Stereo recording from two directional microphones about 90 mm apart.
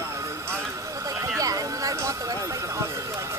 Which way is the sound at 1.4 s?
40° right (ahead or behind).